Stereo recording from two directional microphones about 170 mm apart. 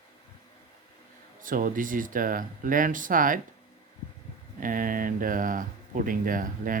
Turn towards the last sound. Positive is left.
turn(degrees=-55)  # may be behind; listen again after turning